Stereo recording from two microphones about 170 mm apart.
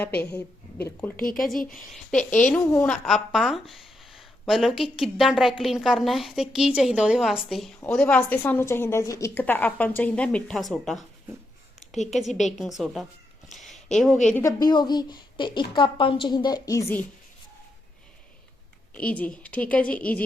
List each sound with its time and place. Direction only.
1.1 s speech: 55° left (ahead or behind)
1.5 s a woman's voice: 5° left (ahead or behind)
12.1 s speech: centre (ahead or behind)
13.5 s a sound: centre (ahead or behind)
14.4 s a woman's voice: 25° left (ahead or behind)
18.9 s a woman's voice: 10° left (ahead or behind)